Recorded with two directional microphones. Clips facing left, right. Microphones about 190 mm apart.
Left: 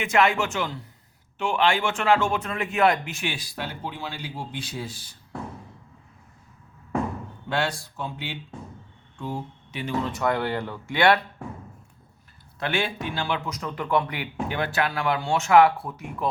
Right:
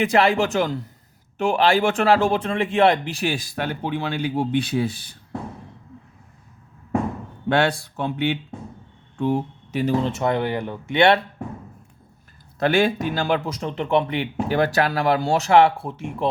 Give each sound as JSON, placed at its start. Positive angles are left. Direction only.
{"t": 0.0, "sound": "a man's voice", "side_deg": -35}
{"t": 7.5, "sound": "speech", "side_deg": -65}
{"t": 9.7, "sound": "speech", "side_deg": -35}
{"t": 12.5, "sound": "a man's voice", "side_deg": -40}